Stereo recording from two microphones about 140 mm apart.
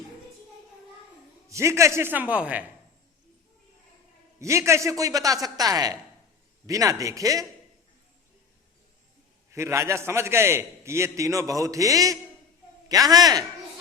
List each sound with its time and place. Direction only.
1.5 s speech: 20° right (ahead or behind)
4.4 s a man's voice: 20° right (ahead or behind)
9.5 s a man's voice: 20° right (ahead or behind)